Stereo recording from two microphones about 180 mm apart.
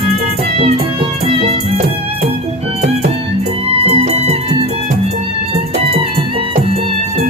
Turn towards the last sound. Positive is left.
turn(degrees=-30)  # may be behind; listen again after turning